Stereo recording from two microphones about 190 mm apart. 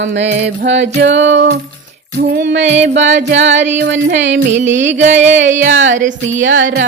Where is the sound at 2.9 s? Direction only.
70° right (ahead or behind).